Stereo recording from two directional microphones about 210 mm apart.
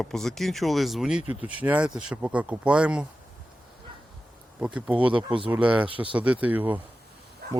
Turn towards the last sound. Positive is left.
turn(degrees=-50)  # may be behind; listen again after turning